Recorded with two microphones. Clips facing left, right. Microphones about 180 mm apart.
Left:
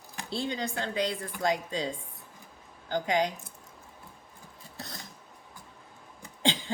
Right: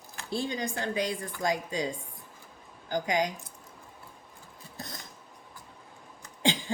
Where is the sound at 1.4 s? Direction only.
20° right (ahead or behind).